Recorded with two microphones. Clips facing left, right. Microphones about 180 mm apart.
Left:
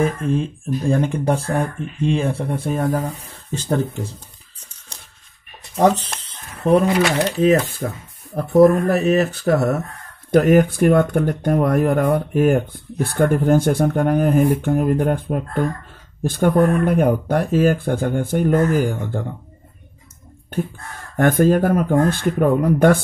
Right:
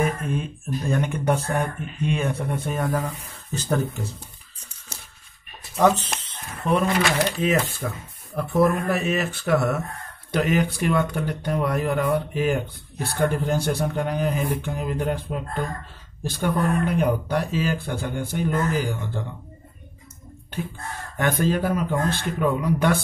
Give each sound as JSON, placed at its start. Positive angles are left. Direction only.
{"t": 0.0, "sound": "speech", "side_deg": 30}
{"t": 5.8, "sound": "speech", "side_deg": 35}
{"t": 10.3, "sound": "speech", "side_deg": 50}
{"t": 21.2, "sound": "speech", "side_deg": 50}